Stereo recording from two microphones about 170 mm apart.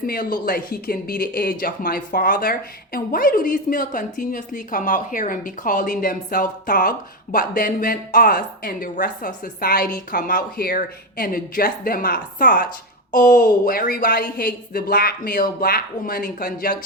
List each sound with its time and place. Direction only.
0.1 s speech: 55° left (ahead or behind)